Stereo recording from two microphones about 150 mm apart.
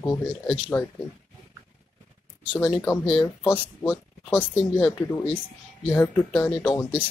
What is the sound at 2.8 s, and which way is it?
Speech, 25° left (ahead or behind).